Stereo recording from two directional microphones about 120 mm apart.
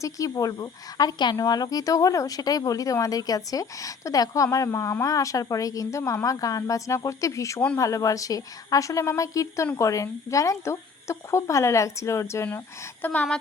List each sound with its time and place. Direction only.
0.0 s a woman's voice: 30° left (ahead or behind)